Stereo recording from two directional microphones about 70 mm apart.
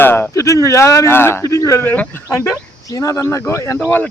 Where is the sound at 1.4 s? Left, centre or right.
Left.